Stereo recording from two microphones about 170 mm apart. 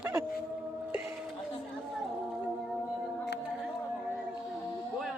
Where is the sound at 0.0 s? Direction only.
15° right (ahead or behind).